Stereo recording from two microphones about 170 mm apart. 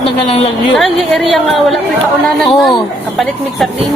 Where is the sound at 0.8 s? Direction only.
Centre (ahead or behind).